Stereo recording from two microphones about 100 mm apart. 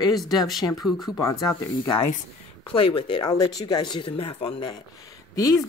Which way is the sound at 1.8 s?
50° left (ahead or behind).